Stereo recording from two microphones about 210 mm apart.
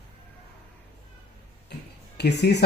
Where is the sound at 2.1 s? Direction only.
50° left (ahead or behind).